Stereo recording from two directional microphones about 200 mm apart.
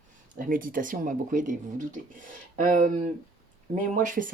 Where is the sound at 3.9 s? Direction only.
40° right (ahead or behind).